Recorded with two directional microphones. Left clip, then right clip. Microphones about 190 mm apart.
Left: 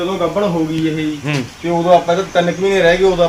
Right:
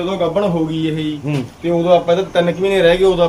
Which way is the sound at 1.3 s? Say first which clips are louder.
Left 3 dB; centre (ahead or behind).